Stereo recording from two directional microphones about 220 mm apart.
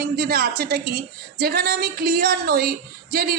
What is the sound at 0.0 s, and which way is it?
A woman's voice, 45° right (ahead or behind).